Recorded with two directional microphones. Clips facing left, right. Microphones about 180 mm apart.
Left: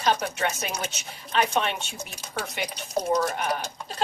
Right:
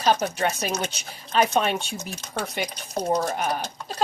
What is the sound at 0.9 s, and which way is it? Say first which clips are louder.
Speech: right 1 dB; 35° right (ahead or behind).